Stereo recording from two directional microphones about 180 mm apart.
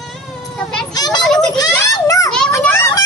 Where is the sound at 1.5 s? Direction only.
20° left (ahead or behind).